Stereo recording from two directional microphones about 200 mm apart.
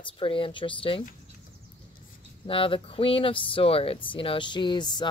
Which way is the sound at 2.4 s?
25° left (ahead or behind).